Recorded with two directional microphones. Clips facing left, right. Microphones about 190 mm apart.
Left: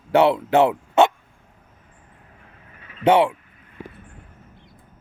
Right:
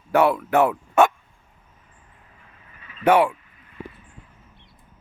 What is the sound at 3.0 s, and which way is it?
Speech, 25° left (ahead or behind).